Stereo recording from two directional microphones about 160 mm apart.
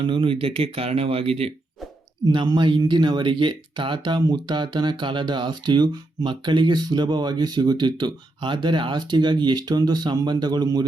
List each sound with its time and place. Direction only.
0.0 s speech: 35° right (ahead or behind)
2.2 s speech: 25° right (ahead or behind)